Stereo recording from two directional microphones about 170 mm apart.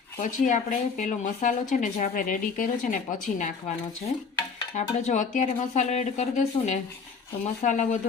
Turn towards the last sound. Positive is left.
turn(degrees=45)  # may be behind; listen again after turning